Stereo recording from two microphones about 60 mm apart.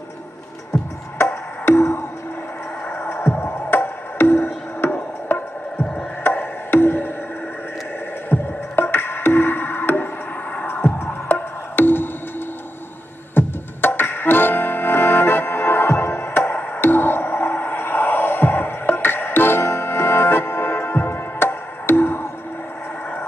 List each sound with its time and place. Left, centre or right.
1.8 s a sound: left
2.9 s music: left
8.3 s music: left
11.2 s music: left
13.3 s music: left